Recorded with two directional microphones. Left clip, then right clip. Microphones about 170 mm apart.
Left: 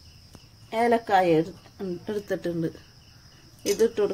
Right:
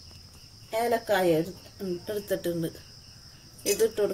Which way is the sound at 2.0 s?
50° left (ahead or behind).